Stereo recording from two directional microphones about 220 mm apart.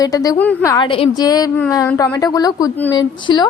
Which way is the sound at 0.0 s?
15° left (ahead or behind).